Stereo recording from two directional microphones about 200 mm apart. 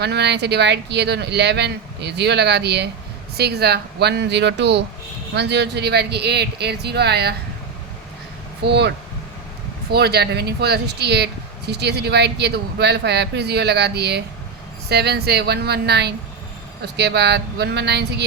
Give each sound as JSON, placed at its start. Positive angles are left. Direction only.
{"t": 0.0, "sound": "speech", "side_deg": -55}
{"t": 8.6, "sound": "speech", "side_deg": -55}
{"t": 9.9, "sound": "speech", "side_deg": -55}